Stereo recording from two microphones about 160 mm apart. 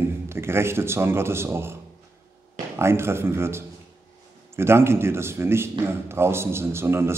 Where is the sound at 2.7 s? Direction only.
15° right (ahead or behind).